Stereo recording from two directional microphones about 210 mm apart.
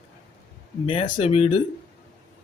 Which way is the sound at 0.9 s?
30° left (ahead or behind).